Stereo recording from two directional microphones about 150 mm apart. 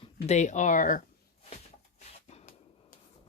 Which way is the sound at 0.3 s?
50° left (ahead or behind).